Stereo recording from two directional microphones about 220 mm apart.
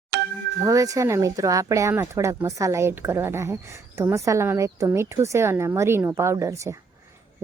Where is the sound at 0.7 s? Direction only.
15° right (ahead or behind).